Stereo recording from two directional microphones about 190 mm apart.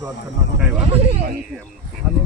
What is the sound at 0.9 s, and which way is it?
Speech, 30° right (ahead or behind).